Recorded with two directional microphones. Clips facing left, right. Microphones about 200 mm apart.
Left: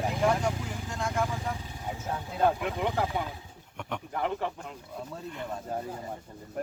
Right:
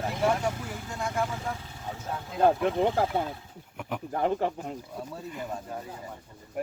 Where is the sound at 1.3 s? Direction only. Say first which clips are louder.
Even; 15° left (ahead or behind).